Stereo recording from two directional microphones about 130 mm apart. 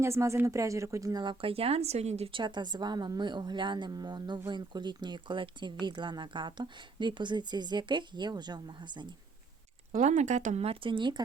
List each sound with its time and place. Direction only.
0.0 s speech: 20° right (ahead or behind)
1.2 s speech: 40° right (ahead or behind)
2.4 s a woman's voice: 35° right (ahead or behind)
9.9 s speech: 65° right (ahead or behind); by 11.2 s 40° right (ahead or behind)